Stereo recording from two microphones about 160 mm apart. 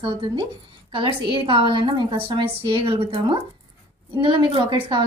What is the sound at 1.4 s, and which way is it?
A woman's voice, 30° right (ahead or behind).